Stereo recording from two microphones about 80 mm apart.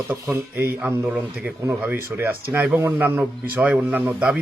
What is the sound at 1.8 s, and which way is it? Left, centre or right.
Speech, right.